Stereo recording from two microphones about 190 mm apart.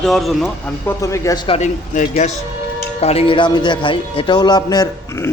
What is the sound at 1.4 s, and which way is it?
A man's voice, 35° left (ahead or behind).